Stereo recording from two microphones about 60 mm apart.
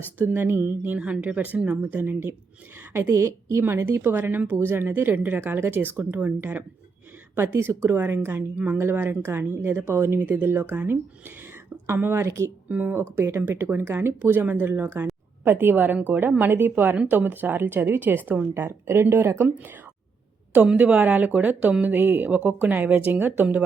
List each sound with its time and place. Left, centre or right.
0.2 s speech: right
0.9 s speech: right
2.7 s a woman's voice: right
3.7 s speech: right
7.7 s speech: right
7.9 s speech: right
8.8 s speech: right
12.6 s speech: right
13.1 s speech: right
20.7 s speech: right